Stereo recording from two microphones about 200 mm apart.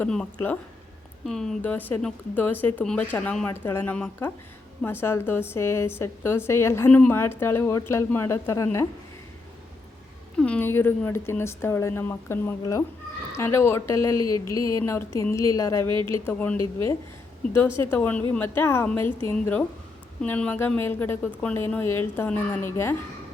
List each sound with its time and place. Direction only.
0.0 s speech: 5° left (ahead or behind)
10.3 s speech: 5° left (ahead or behind)